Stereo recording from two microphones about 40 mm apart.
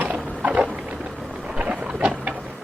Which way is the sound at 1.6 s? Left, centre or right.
Right.